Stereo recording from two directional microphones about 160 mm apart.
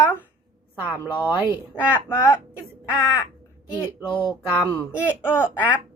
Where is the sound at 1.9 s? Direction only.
15° left (ahead or behind).